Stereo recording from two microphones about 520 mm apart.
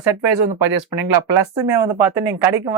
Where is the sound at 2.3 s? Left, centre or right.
Centre.